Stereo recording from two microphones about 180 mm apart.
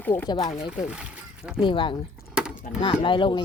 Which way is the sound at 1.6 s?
25° left (ahead or behind).